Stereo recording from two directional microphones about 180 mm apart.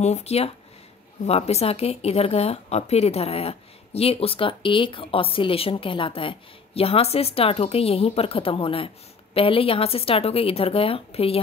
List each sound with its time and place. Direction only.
0.0 s speech: 35° left (ahead or behind)